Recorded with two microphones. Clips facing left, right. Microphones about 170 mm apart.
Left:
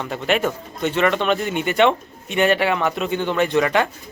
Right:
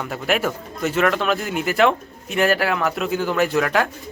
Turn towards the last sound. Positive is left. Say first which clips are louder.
# left 1 dB
turn(degrees=0)  # may be behind; listen again after turning